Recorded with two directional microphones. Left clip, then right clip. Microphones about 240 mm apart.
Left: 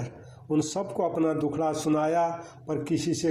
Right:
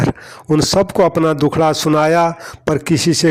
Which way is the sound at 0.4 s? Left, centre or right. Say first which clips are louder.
Right 14 dB; right.